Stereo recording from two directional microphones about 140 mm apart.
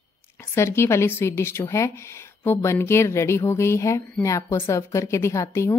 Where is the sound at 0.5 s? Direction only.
20° left (ahead or behind).